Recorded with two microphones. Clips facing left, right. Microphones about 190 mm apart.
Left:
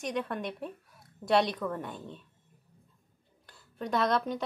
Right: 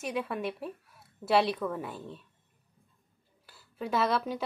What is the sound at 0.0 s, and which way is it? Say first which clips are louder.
Speech: right 1 dB; 5° right (ahead or behind).